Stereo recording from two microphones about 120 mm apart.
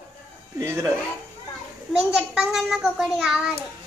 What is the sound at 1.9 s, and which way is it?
A child's voice, 10° right (ahead or behind).